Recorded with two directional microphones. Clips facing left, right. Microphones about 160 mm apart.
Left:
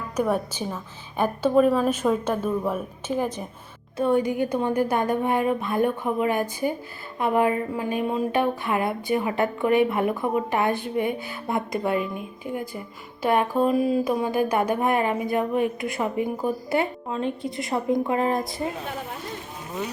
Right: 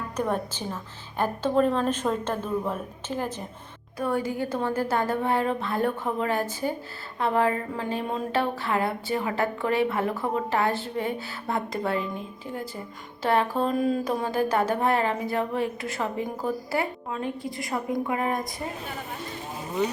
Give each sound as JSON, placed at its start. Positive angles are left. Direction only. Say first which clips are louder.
{"t": 0.2, "sound": "speech", "louder": "left 4 dB", "side_deg": 10}